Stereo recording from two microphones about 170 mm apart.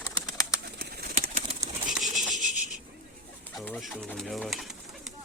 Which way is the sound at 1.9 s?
Centre (ahead or behind).